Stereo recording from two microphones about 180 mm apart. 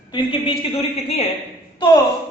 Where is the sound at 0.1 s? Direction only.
30° left (ahead or behind).